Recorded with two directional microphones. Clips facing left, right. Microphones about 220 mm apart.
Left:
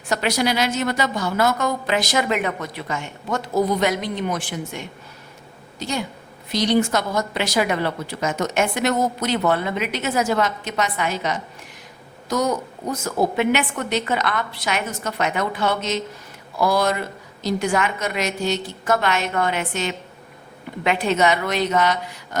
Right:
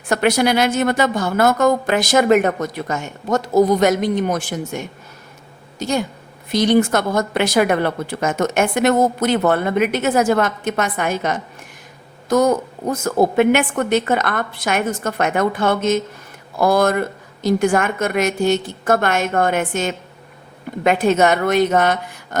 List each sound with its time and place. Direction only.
0.1 s a woman's voice: 55° right (ahead or behind)